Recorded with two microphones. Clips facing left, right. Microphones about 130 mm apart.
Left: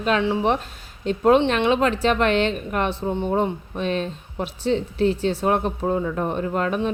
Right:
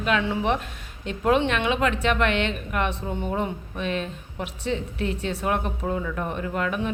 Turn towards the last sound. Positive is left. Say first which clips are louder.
# left 4 dB
turn(degrees=30)  # may be behind; listen again after turning